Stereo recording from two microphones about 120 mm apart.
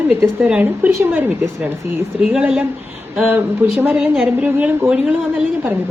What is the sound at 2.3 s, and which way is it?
Speech, 10° right (ahead or behind).